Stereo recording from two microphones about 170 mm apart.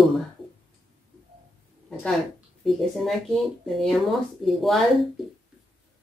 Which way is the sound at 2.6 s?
Centre (ahead or behind).